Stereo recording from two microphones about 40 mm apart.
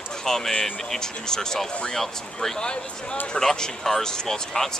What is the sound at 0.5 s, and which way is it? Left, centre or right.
Speech, left.